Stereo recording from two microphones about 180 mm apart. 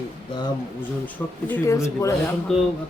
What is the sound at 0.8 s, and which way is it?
A woman's voice, 10° left (ahead or behind).